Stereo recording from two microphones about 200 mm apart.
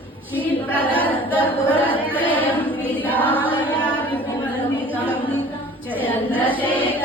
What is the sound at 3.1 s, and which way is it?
Choir, 10° left (ahead or behind).